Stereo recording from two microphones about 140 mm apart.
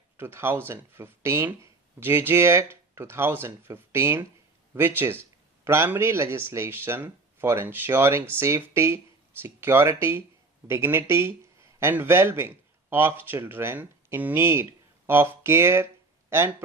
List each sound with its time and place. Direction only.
0.2 s speech: 15° right (ahead or behind)